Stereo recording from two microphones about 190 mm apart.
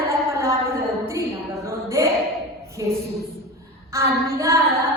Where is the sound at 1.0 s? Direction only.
15° right (ahead or behind).